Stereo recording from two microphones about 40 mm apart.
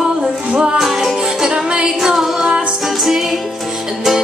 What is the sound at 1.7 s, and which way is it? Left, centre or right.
A capella, centre.